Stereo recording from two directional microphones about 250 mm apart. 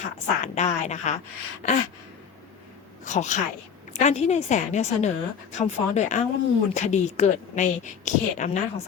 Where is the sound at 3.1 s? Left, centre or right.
Left.